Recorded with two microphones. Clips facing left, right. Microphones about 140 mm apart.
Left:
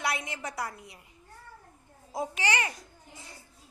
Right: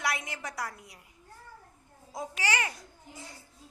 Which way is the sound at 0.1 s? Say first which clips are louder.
Left 1 dB; centre (ahead or behind).